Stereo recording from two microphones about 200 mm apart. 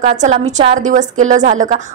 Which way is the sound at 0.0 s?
35° right (ahead or behind).